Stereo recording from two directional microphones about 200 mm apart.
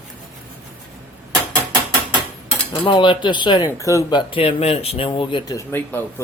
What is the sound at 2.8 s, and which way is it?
Speech, 25° left (ahead or behind).